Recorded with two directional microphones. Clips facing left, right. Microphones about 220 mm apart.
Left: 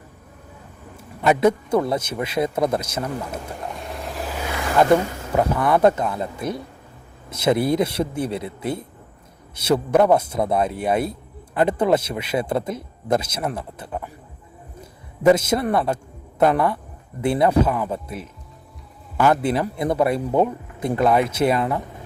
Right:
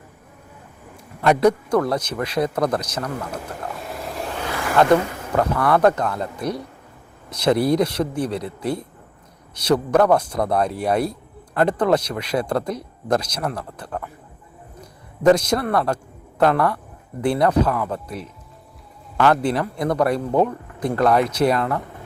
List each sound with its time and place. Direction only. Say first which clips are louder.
0.9 s a sound: right 1 dB; 5° left (ahead or behind)
1.8 s speech: right 1 dB; 25° left (ahead or behind)
2.0 s speech: right 1 dB; 5° left (ahead or behind)
2.4 s speech: even; 25° left (ahead or behind)
2.9 s vehicle: even; 5° left (ahead or behind)
4.4 s vehicle: even; 20° left (ahead or behind)
5.3 s speech: even; 15° left (ahead or behind)
6.1 s speech: right 1 dB; 5° left (ahead or behind)
15.2 s speech: even; 5° left (ahead or behind)
15.5 s speech: even; 25° left (ahead or behind)
16.4 s speech: even; 5° left (ahead or behind)